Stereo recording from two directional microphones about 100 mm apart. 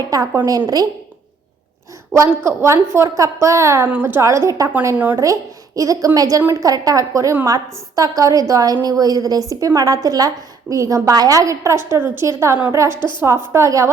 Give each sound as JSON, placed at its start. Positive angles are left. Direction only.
{"t": 0.1, "sound": "a woman's voice", "side_deg": -35}
{"t": 2.4, "sound": "a woman's voice", "side_deg": -25}
{"t": 13.0, "sound": "a woman's voice", "side_deg": 50}
{"t": 13.2, "sound": "a woman's voice", "side_deg": -30}